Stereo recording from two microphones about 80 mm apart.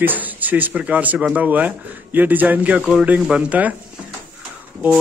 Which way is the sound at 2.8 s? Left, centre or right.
Centre.